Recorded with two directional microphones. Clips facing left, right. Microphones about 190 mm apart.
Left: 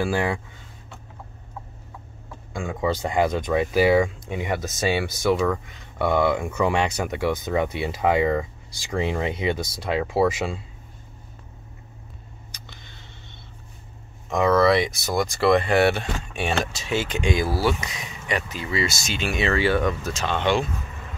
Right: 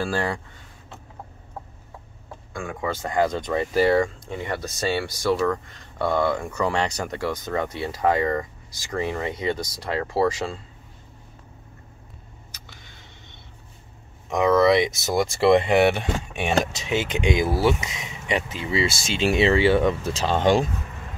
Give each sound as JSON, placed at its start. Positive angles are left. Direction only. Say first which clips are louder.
{"t": 0.0, "sound": "speech", "louder": "left 2 dB", "side_deg": 15}
{"t": 2.5, "sound": "speech", "louder": "left 4 dB", "side_deg": 20}
{"t": 6.3, "sound": "speech", "louder": "left 2 dB", "side_deg": 10}
{"t": 6.7, "sound": "speech", "louder": "left 2 dB", "side_deg": 20}
{"t": 12.5, "sound": "a sound", "louder": "left 2 dB", "side_deg": -10}
{"t": 14.3, "sound": "speech", "louder": "right 1 dB", "side_deg": -15}